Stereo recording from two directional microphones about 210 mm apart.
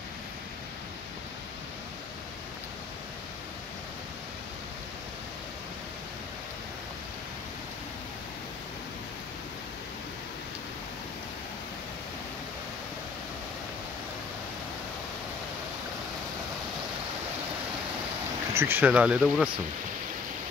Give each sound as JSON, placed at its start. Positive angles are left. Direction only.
{"t": 18.5, "sound": "speech", "side_deg": -10}